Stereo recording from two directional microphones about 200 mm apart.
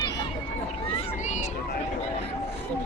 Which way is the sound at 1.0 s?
35° left (ahead or behind).